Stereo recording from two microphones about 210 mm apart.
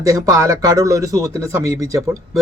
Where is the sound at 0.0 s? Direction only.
15° right (ahead or behind).